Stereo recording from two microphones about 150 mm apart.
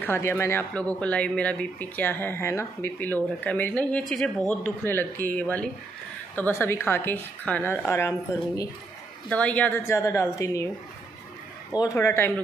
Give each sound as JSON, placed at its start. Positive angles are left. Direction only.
{"t": 0.0, "sound": "speech", "side_deg": 15}
{"t": 9.3, "sound": "speech", "side_deg": 10}
{"t": 11.8, "sound": "speech", "side_deg": 20}